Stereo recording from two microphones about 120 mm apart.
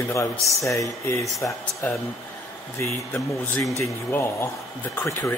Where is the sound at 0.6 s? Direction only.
25° left (ahead or behind).